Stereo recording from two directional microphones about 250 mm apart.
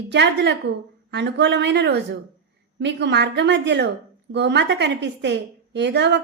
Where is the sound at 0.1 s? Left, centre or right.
Right.